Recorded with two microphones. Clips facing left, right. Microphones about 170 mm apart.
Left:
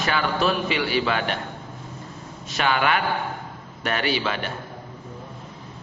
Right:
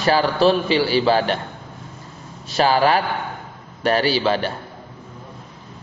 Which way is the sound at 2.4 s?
35° right (ahead or behind).